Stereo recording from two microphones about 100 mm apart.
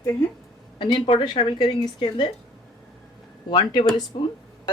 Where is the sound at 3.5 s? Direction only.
55° left (ahead or behind).